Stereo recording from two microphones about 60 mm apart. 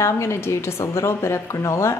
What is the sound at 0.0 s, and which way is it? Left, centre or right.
A woman's voice, left.